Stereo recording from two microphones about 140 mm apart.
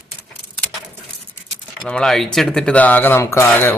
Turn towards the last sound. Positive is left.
turn(degrees=15)  # may be behind; listen again after turning